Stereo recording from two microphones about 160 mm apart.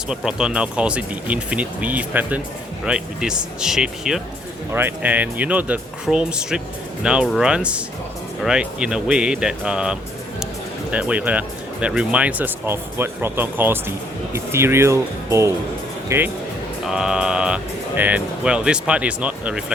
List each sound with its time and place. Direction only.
0.1 s speech: 5° right (ahead or behind)